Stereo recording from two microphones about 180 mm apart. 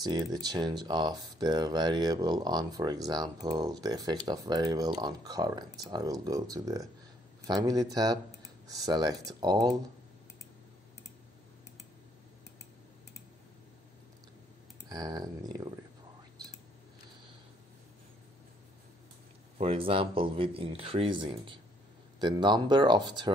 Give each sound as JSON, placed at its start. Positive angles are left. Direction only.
{"t": 0.0, "sound": "speech", "side_deg": -20}
{"t": 14.9, "sound": "speech", "side_deg": -20}
{"t": 19.6, "sound": "speech", "side_deg": -30}